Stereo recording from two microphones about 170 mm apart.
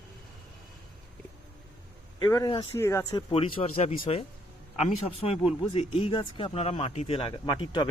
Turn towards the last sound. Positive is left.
turn(degrees=25)  # may be behind; listen again after turning